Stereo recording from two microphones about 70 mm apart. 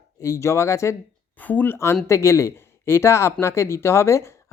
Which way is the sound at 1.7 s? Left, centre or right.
Left.